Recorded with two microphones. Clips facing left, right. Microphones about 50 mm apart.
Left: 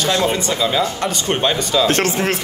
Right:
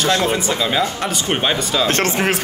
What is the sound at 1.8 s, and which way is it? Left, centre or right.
Speech, right.